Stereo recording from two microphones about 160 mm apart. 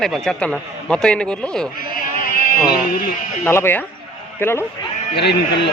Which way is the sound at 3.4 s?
15° left (ahead or behind).